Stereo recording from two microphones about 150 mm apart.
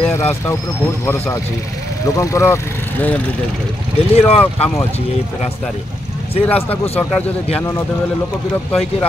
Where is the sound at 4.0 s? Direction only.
45° left (ahead or behind).